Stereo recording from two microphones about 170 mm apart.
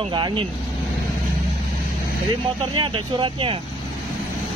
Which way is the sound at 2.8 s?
30° right (ahead or behind).